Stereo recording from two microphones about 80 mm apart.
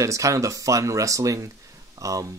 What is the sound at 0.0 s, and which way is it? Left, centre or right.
Speech, right.